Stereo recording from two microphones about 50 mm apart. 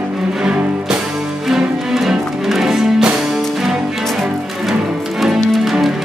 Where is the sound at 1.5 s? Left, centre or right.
Centre.